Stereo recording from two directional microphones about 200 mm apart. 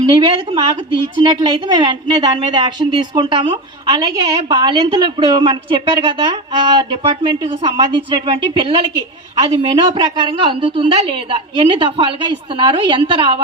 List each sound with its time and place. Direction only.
0.1 s a woman's voice: 25° right (ahead or behind)